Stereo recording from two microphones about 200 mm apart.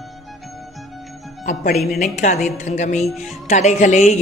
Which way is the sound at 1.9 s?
40° left (ahead or behind).